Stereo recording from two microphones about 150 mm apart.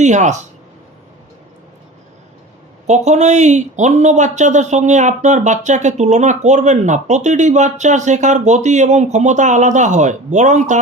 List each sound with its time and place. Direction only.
0.0 s speech: 50° right (ahead or behind)
2.8 s speech: 50° right (ahead or behind)